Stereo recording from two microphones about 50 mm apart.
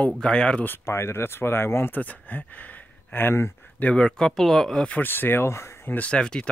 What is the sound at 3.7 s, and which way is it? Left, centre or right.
Speech, left.